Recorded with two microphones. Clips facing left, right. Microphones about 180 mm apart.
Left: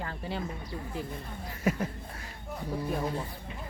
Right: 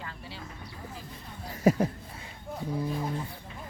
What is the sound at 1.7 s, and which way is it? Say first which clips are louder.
Speech: right 6 dB; 40° right (ahead or behind).